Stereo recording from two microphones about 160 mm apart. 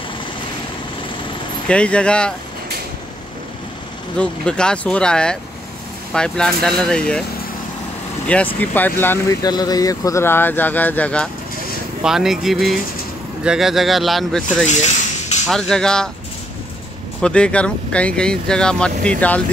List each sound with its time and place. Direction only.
1.7 s speech: 5° left (ahead or behind)
4.2 s speech: 5° left (ahead or behind)
8.5 s speech: 10° left (ahead or behind)
12.0 s speech: 5° right (ahead or behind)
14.7 s a sound: 45° left (ahead or behind)
15.4 s speech: 5° left (ahead or behind)
17.2 s speech: 5° left (ahead or behind)